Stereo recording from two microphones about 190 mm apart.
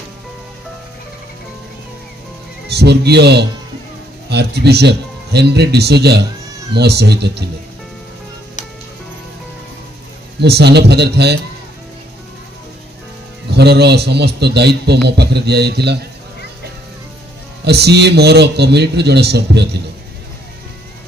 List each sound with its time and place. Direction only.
2.7 s a man's voice: 60° right (ahead or behind)
10.4 s a man's voice: 60° right (ahead or behind)
13.5 s a man's voice: 60° right (ahead or behind)
17.6 s a man's voice: 60° right (ahead or behind)